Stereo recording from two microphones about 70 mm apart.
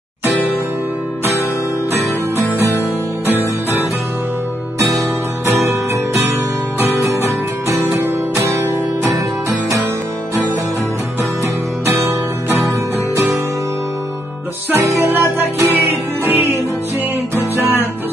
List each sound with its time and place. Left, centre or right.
7.7 s music: right
11.8 s music: right
14.7 s music: right